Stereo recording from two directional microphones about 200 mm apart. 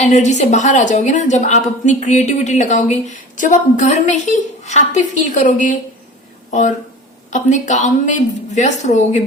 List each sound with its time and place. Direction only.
0.0 s a woman's voice: 35° left (ahead or behind)